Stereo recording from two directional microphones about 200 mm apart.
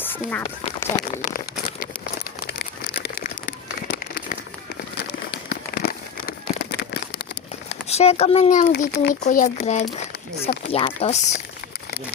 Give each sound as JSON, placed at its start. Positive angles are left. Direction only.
{"t": 0.0, "sound": "speech", "side_deg": 10}
{"t": 0.9, "sound": "crumpling", "side_deg": 45}
{"t": 2.5, "sound": "crumpling", "side_deg": 55}
{"t": 4.9, "sound": "crumpling", "side_deg": 55}
{"t": 7.9, "sound": "speech", "side_deg": 30}
{"t": 10.7, "sound": "speech", "side_deg": 30}